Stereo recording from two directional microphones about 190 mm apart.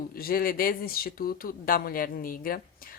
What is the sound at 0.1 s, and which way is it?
A woman's voice, 50° left (ahead or behind).